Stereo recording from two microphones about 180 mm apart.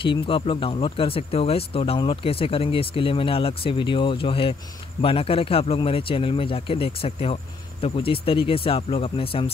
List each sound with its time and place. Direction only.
0.0 s speech: 30° left (ahead or behind)